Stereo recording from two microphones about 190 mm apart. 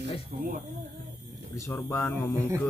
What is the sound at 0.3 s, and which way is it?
Speech, 50° right (ahead or behind).